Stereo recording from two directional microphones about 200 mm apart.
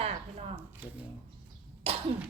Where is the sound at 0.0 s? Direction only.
30° right (ahead or behind).